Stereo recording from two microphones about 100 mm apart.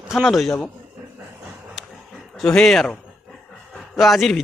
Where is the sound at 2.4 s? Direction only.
5° left (ahead or behind).